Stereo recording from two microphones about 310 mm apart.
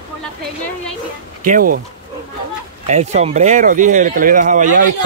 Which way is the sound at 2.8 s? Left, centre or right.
Right.